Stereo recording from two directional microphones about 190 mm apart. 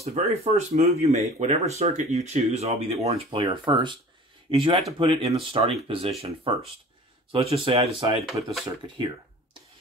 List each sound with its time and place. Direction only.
0.0 s speech: 35° right (ahead or behind)